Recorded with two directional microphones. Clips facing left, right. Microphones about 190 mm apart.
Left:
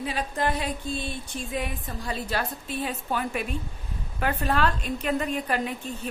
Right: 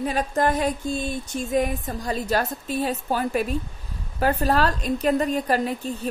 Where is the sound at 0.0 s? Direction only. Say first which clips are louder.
Right 5 dB; 45° right (ahead or behind).